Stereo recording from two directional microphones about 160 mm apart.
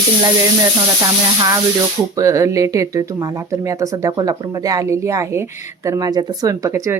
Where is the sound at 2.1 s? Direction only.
20° right (ahead or behind).